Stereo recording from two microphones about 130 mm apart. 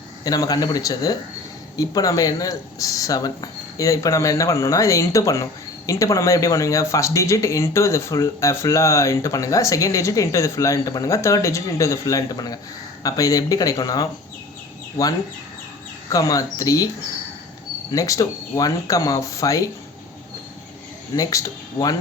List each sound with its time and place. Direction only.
0.3 s speech: 30° left (ahead or behind)
16.0 s speech: 25° left (ahead or behind)
17.9 s speech: 25° left (ahead or behind)
21.2 s speech: 25° left (ahead or behind)